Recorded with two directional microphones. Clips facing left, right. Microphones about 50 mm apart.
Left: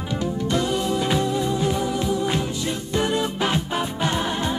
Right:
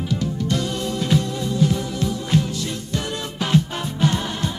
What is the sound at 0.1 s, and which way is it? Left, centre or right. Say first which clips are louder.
Music: left 2 dB; left.